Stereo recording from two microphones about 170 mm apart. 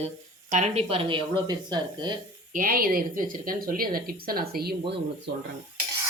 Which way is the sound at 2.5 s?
55° right (ahead or behind).